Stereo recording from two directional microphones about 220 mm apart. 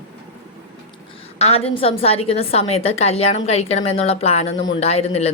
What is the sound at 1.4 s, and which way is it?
A woman's voice, 30° left (ahead or behind).